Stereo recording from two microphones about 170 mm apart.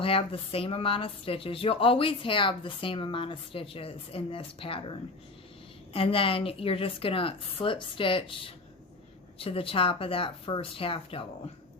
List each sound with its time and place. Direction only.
0.0 s speech: 35° left (ahead or behind)